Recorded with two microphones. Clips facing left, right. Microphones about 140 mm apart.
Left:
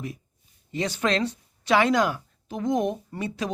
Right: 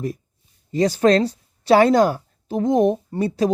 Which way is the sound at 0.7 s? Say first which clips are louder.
Right 10 dB; 35° right (ahead or behind).